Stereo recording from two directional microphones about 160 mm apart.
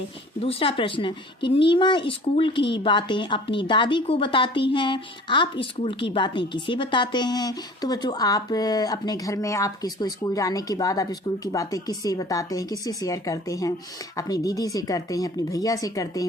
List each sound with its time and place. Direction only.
0.4 s speech: 35° left (ahead or behind)